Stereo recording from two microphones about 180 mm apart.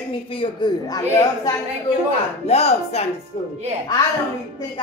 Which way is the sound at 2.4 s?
35° left (ahead or behind).